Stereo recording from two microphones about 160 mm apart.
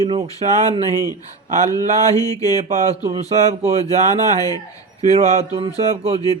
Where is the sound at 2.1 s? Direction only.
20° left (ahead or behind).